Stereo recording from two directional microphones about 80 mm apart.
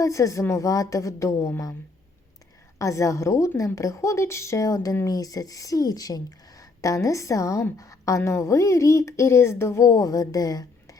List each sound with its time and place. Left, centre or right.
0.0 s speech: left
2.7 s a woman's voice: left